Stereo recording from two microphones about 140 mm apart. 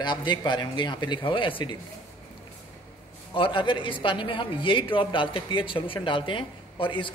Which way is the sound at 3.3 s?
35° left (ahead or behind).